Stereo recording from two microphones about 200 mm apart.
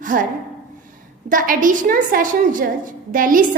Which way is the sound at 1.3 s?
40° right (ahead or behind).